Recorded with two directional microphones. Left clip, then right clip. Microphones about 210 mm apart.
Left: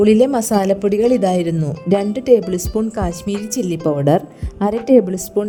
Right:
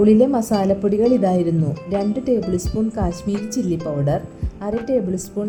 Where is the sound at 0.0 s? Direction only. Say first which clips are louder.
Left 2 dB; 55° left (ahead or behind).